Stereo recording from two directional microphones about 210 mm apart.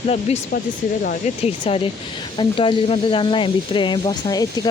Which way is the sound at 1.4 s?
30° left (ahead or behind).